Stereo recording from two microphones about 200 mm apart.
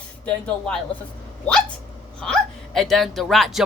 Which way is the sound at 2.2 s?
5° left (ahead or behind).